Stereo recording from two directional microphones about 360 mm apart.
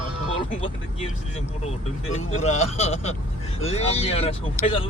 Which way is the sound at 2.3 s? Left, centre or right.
Centre.